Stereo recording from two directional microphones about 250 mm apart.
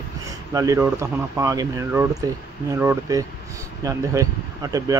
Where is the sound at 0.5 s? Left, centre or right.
Centre.